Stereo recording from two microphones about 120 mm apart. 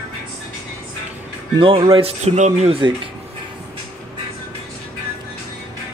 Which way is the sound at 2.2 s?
75° right (ahead or behind).